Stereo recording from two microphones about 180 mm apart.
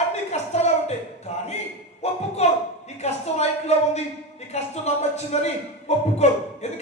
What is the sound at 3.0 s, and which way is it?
A man's voice, 35° left (ahead or behind).